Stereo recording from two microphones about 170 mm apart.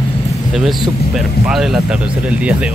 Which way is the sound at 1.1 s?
Centre (ahead or behind).